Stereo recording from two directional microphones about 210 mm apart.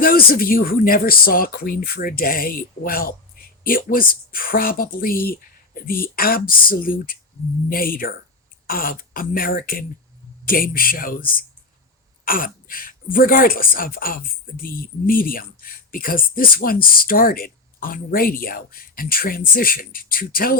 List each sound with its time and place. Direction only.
0.0 s speech: 45° left (ahead or behind)